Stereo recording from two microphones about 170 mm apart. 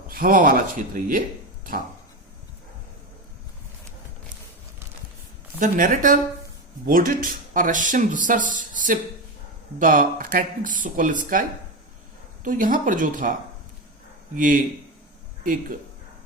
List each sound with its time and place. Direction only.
0.1 s speech: 55° right (ahead or behind)
5.5 s speech: 50° right (ahead or behind)
14.3 s speech: 50° right (ahead or behind)